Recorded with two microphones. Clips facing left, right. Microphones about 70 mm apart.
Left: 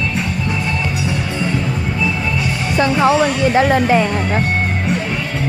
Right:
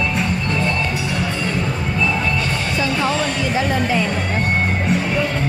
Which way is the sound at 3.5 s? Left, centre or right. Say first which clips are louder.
Left 6 dB; left.